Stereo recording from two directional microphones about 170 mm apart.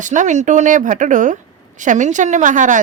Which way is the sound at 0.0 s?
45° right (ahead or behind).